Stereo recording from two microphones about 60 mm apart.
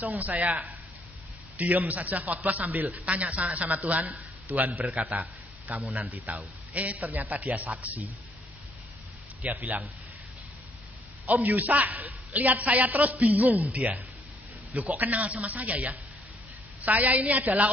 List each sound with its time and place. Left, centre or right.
0.0 s a man's voice: right
9.5 s a man's voice: right
11.2 s a man's voice: right